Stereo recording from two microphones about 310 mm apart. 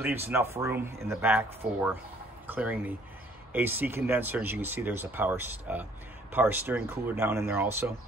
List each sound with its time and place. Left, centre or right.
0.0 s speech: centre